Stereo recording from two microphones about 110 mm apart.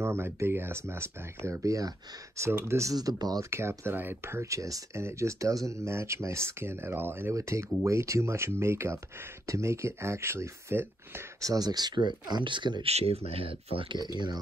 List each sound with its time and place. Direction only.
0.0 s speech: 25° right (ahead or behind)
11.4 s speech: 35° right (ahead or behind)
12.8 s speech: 65° right (ahead or behind)
13.9 s speech: 40° right (ahead or behind)